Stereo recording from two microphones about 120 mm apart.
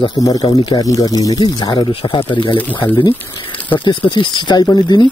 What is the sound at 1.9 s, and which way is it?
Speech, 50° left (ahead or behind).